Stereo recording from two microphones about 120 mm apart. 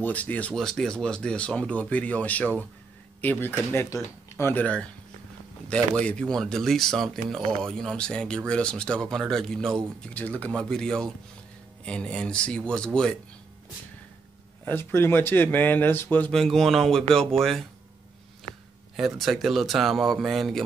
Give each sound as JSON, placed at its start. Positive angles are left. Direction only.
{"t": 0.0, "sound": "speech", "side_deg": 15}
{"t": 5.7, "sound": "speech", "side_deg": 10}
{"t": 14.6, "sound": "speech", "side_deg": 20}
{"t": 16.3, "sound": "speech", "side_deg": 0}
{"t": 18.9, "sound": "speech", "side_deg": 0}